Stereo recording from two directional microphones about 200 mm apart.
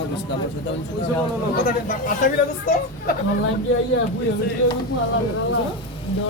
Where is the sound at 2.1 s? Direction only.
40° left (ahead or behind).